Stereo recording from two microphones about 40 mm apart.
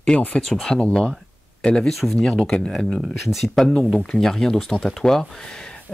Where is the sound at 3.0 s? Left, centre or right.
Centre.